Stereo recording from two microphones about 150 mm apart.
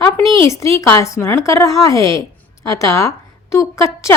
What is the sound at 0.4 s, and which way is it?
A woman's voice, 20° left (ahead or behind).